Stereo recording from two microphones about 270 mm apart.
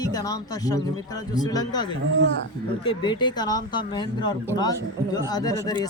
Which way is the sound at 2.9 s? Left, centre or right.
Centre.